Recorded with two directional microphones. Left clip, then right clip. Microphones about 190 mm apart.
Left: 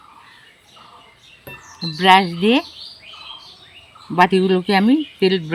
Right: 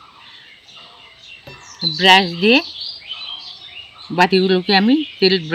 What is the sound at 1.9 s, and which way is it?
Speech, 25° left (ahead or behind).